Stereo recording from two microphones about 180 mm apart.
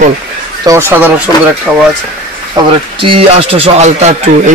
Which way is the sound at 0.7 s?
10° right (ahead or behind).